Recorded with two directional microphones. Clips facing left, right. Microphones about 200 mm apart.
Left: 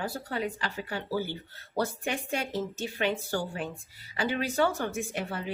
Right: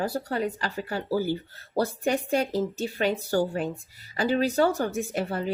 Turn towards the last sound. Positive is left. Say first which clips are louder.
# right 5 dB
turn(degrees=-40)  # may be behind; listen again after turning